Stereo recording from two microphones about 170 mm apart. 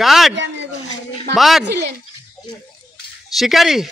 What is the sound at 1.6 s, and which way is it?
Speech, 75° right (ahead or behind).